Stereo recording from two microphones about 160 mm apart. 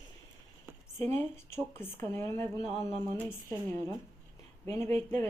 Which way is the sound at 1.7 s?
15° left (ahead or behind).